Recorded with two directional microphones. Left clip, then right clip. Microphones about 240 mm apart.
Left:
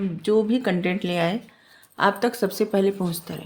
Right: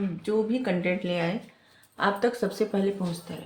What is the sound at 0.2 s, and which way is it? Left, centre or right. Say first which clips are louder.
Speech: left 6 dB; left.